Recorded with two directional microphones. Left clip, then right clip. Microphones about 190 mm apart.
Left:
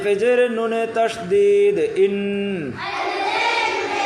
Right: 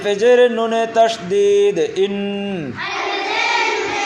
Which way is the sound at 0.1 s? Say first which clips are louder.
Right 5 dB; 25° right (ahead or behind).